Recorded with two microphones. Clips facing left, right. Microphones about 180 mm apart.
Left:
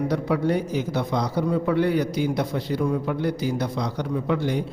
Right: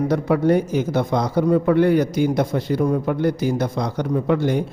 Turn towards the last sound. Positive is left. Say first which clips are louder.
# right 5 dB
turn(degrees=-50)  # may be behind; listen again after turning